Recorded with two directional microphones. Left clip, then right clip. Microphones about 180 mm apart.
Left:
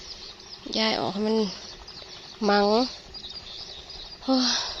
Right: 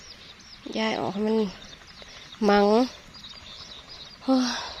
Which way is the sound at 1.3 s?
10° right (ahead or behind).